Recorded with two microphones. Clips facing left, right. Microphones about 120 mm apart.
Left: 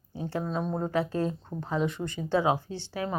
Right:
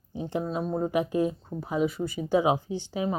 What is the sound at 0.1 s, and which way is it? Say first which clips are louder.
Speech: right 2 dB; 20° right (ahead or behind).